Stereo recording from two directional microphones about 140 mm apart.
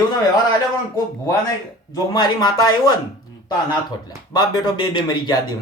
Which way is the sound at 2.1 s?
30° left (ahead or behind).